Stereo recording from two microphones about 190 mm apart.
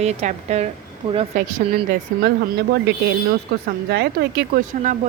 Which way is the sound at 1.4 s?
55° right (ahead or behind).